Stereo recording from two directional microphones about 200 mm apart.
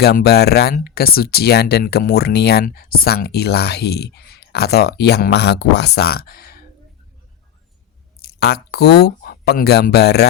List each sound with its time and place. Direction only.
0.0 s speech: 50° left (ahead or behind)
8.2 s speech: 55° left (ahead or behind)